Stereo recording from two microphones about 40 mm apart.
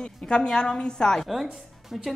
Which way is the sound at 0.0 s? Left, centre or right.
Left.